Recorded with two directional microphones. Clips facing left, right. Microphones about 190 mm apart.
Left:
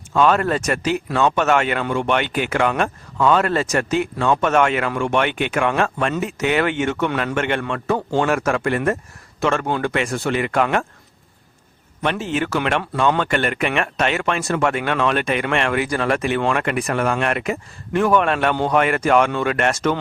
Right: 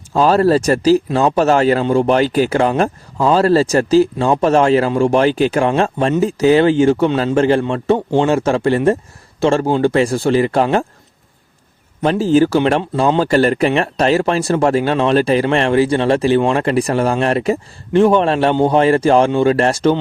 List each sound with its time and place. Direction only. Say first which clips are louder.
0.1 s speech: right 5 dB; 35° right (ahead or behind)
12.0 s speech: right 10 dB; 35° right (ahead or behind)